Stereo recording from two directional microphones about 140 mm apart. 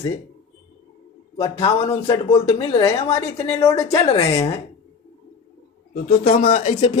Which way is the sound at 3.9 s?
45° left (ahead or behind).